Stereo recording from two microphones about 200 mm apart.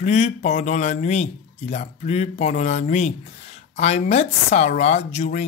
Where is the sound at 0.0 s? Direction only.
35° left (ahead or behind).